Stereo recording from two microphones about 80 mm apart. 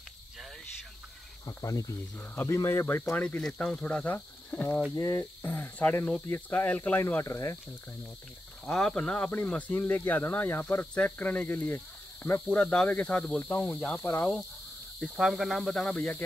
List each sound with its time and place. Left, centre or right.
1.4 s speech: left
3.2 s speech: centre
4.0 s speech: left
4.9 s speech: left
7.2 s speech: left
8.6 s speech: centre
11.6 s snake: centre
12.4 s speech: centre
13.4 s speech: left
15.0 s speech: centre